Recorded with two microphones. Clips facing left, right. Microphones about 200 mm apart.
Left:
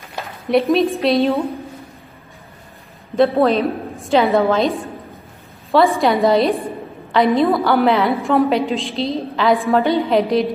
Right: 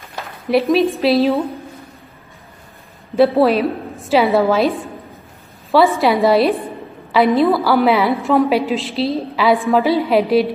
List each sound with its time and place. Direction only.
0.2 s speech: centre (ahead or behind)
3.2 s a woman's voice: 5° right (ahead or behind)
5.9 s a woman's voice: centre (ahead or behind)